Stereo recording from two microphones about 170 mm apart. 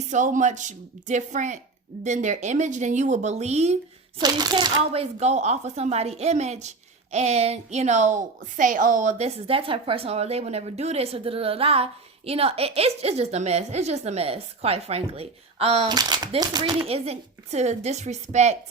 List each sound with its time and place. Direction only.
0.1 s speech: 45° right (ahead or behind)
4.2 s speech: 25° right (ahead or behind)
4.9 s a woman's voice: 40° right (ahead or behind); by 16.7 s 25° right (ahead or behind)
16.8 s a woman's voice: 35° right (ahead or behind)